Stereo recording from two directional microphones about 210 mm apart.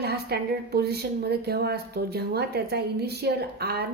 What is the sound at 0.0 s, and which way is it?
A woman's voice, 50° right (ahead or behind).